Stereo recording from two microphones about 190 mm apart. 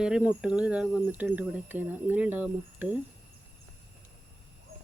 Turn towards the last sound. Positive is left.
turn(degrees=-10)  # may be behind; listen again after turning